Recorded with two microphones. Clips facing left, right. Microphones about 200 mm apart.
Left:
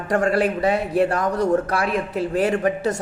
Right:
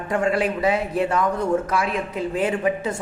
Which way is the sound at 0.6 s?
60° left (ahead or behind).